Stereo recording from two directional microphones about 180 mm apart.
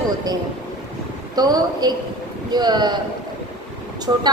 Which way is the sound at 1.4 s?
20° right (ahead or behind).